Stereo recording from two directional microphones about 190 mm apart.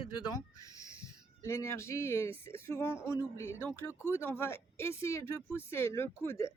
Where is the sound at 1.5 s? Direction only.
15° left (ahead or behind).